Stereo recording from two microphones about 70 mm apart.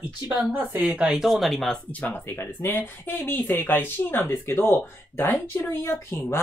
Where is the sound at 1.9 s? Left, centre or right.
Left.